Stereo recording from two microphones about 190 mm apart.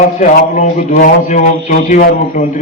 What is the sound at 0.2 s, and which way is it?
Speech, 40° left (ahead or behind).